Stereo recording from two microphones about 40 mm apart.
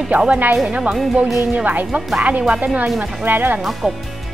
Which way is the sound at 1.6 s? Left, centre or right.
Right.